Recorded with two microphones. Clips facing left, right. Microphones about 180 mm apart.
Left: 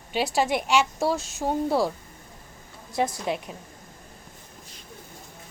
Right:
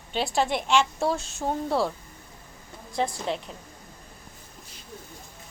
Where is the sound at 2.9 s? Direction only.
10° left (ahead or behind).